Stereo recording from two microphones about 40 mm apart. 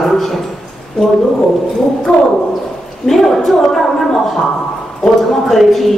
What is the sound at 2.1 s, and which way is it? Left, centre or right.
Speech, left.